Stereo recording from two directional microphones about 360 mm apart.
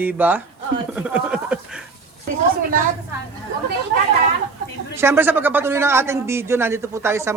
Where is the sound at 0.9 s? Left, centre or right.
Centre.